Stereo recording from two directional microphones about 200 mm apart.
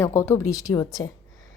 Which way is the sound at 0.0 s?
15° left (ahead or behind).